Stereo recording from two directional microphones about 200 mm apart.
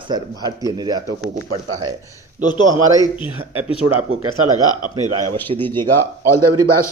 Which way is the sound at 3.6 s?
30° left (ahead or behind).